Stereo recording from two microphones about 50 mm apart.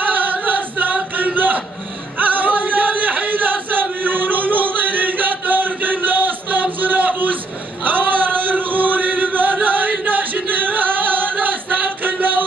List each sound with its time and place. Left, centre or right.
0.2 s choir: right
2.1 s chant: right
11.4 s music: right